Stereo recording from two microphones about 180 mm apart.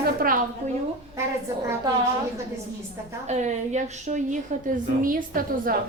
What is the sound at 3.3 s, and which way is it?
A woman's voice, 40° right (ahead or behind).